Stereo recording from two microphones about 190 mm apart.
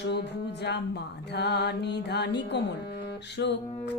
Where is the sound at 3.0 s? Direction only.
65° left (ahead or behind).